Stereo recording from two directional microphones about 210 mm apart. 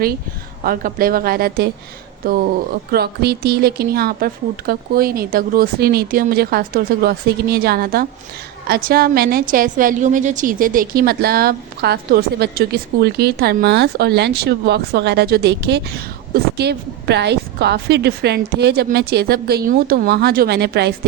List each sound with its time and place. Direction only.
0.6 s a woman's voice: 45° right (ahead or behind)
2.9 s a woman's voice: 50° right (ahead or behind)